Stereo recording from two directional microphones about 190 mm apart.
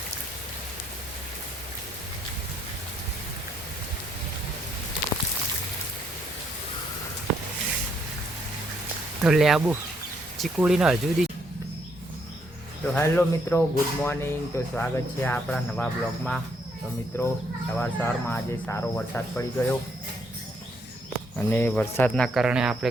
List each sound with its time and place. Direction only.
9.2 s speech: centre (ahead or behind)
12.8 s speech: 5° left (ahead or behind)
21.3 s speech: 10° left (ahead or behind)